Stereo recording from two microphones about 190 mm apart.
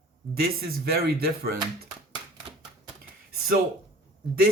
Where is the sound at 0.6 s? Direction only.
55° right (ahead or behind).